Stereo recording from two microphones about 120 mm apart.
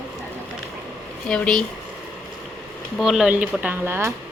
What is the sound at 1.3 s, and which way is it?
Speech, 5° left (ahead or behind).